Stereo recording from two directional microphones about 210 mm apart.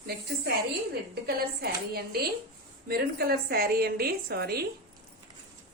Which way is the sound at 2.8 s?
45° right (ahead or behind).